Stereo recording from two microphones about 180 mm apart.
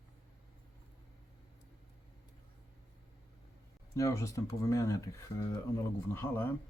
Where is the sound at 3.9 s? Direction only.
15° left (ahead or behind).